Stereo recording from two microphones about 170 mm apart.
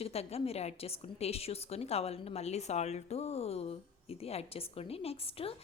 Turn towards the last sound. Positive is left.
turn(degrees=35)  # may be behind; listen again after turning